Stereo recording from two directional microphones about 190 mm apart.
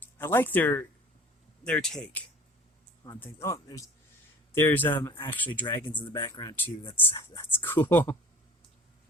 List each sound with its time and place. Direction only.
0.0 s speech: 10° left (ahead or behind)
3.0 s speech: 15° left (ahead or behind)
5.6 s speech: 25° left (ahead or behind)